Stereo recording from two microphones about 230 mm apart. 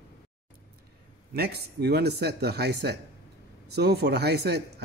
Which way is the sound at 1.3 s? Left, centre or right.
Right.